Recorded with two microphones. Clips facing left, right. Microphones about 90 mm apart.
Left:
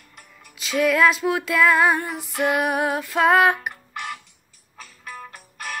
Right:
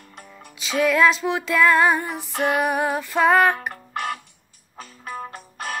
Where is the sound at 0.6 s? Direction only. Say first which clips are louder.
Even; centre (ahead or behind).